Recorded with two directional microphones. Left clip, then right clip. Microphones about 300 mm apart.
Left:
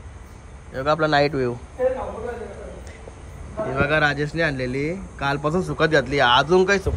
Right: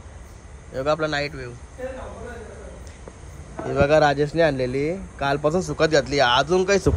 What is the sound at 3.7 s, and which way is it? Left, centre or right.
Speech, centre.